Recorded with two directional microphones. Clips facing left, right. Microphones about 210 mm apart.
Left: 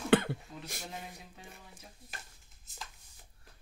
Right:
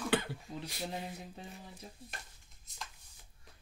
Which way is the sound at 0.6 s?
50° left (ahead or behind).